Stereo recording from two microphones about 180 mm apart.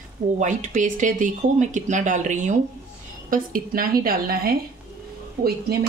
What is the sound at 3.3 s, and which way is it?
Speech, 55° right (ahead or behind).